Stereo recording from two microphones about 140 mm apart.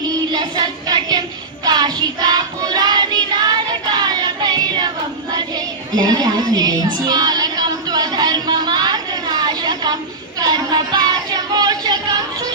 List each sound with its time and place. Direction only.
0.3 s child singing: 30° right (ahead or behind)
5.9 s music: 30° right (ahead or behind)